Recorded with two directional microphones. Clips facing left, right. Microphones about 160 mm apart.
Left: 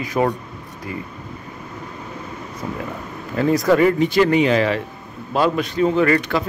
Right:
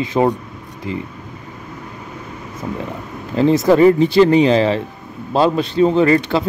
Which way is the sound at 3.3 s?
25° right (ahead or behind).